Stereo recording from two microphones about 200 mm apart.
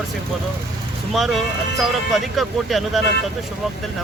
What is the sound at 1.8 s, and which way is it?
Speech, centre (ahead or behind).